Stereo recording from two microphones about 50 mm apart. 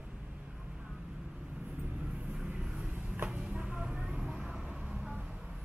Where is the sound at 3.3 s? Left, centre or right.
Right.